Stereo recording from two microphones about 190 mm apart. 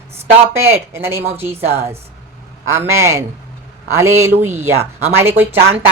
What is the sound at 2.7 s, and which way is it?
Speech, 15° right (ahead or behind).